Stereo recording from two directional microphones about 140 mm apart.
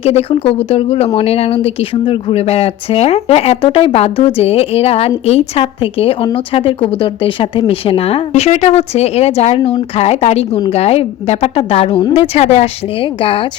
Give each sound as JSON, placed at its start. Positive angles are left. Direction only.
{"t": 0.0, "sound": "speech", "side_deg": 45}